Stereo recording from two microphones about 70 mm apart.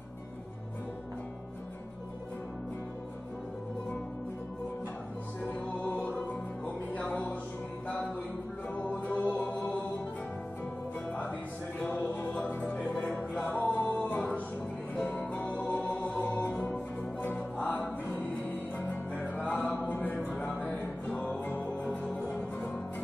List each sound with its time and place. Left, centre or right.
5.5 s music: centre
8.6 s music: left
11.1 s music: left